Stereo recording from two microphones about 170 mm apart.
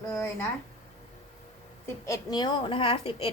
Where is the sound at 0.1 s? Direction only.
15° left (ahead or behind).